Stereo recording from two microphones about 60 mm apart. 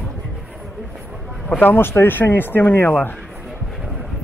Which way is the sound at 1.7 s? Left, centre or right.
Left.